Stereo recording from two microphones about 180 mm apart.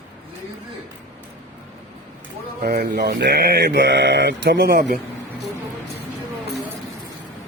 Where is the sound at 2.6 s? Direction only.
55° right (ahead or behind).